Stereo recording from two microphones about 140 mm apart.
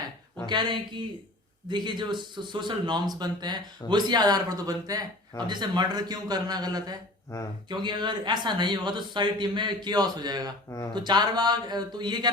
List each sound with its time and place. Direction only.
0.4 s a man's voice: 30° right (ahead or behind)